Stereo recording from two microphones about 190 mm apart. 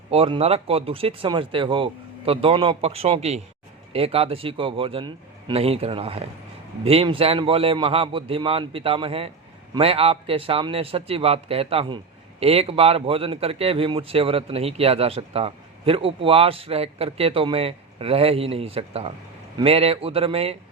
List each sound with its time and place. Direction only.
0.1 s a man's voice: 30° right (ahead or behind)